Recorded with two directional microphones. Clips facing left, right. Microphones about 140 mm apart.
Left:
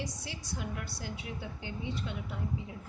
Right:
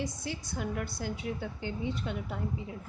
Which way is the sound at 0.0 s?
50° right (ahead or behind).